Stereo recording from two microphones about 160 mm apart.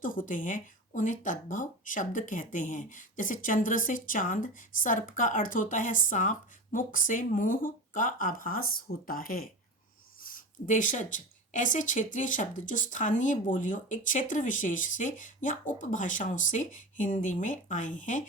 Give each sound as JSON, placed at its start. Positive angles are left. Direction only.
{"t": 0.0, "sound": "a woman's voice", "side_deg": 55}